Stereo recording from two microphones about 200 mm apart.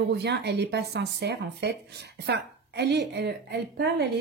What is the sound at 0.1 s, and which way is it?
A woman's voice, 55° right (ahead or behind).